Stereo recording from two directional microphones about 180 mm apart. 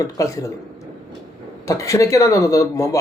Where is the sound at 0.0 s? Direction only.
20° left (ahead or behind).